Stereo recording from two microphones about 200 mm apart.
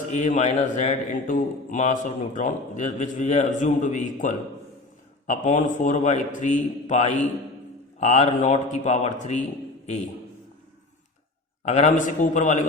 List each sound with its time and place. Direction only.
0.1 s a man's voice: 35° left (ahead or behind)
11.6 s a man's voice: 35° left (ahead or behind)